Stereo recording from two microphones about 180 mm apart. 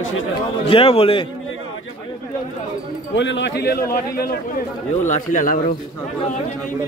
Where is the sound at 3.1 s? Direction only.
85° left; by 4.4 s 60° left (ahead or behind).